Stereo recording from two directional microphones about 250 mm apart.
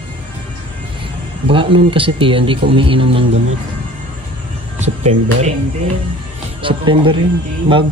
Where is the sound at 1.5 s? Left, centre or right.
Right.